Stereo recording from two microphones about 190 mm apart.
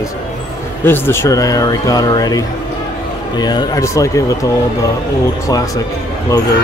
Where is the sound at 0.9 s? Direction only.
10° left (ahead or behind).